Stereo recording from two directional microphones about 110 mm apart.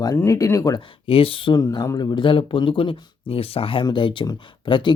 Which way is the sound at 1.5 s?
40° left (ahead or behind).